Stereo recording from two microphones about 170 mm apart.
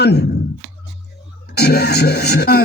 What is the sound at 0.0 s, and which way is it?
Speech, 75° left (ahead or behind).